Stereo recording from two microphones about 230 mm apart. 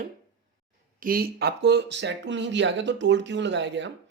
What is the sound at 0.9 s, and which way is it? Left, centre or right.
Speech, right.